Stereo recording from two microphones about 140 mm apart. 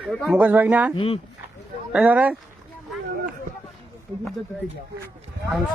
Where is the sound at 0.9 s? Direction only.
40° left (ahead or behind).